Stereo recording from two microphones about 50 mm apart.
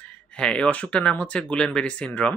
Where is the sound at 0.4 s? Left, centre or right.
Centre.